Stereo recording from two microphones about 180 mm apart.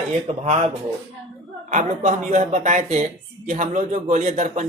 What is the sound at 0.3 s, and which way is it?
A man's voice, 35° right (ahead or behind).